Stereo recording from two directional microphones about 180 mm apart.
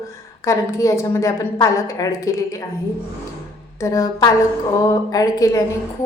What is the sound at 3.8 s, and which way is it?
A woman's voice, 20° left (ahead or behind).